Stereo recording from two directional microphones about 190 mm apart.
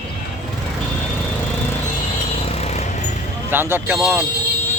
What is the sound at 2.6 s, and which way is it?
Vehicle, 35° left (ahead or behind).